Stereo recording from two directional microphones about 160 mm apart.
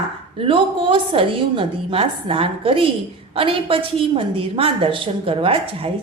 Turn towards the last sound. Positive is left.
turn(degrees=-35)  # may be behind; listen again after turning